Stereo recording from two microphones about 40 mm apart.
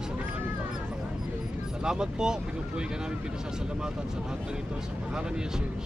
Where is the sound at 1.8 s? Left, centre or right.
Centre.